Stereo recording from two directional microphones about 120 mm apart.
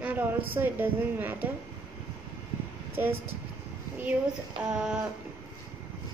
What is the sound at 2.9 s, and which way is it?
Speech, 15° right (ahead or behind).